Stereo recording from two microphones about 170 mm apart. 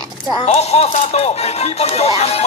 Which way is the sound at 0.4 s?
35° left (ahead or behind).